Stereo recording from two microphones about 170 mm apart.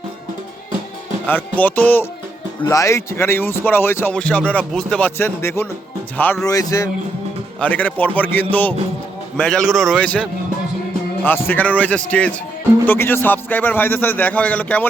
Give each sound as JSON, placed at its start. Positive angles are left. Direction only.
{"t": 1.3, "sound": "a man's voice", "side_deg": 10}
{"t": 7.6, "sound": "a man's voice", "side_deg": 10}